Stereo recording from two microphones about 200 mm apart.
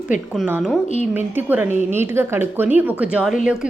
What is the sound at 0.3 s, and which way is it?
A woman's voice, 5° right (ahead or behind).